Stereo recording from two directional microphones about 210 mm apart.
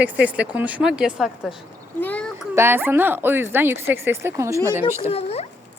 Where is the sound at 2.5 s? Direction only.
10° right (ahead or behind).